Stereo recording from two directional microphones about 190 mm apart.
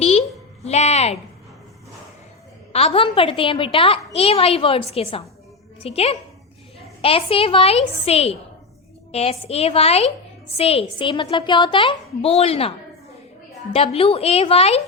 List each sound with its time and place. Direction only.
0.0 s a sound: 35° left (ahead or behind)
2.7 s a woman's voice: 30° left (ahead or behind)
13.7 s a woman's voice: 30° left (ahead or behind)